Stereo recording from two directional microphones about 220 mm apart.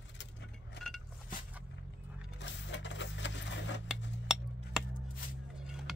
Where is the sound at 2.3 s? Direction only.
55° left (ahead or behind).